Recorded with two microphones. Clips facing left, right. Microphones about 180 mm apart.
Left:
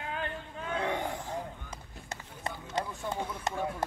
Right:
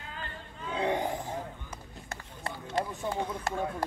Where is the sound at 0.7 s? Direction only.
15° right (ahead or behind).